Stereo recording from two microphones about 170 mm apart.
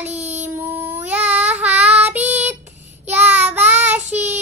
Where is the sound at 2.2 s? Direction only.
40° right (ahead or behind).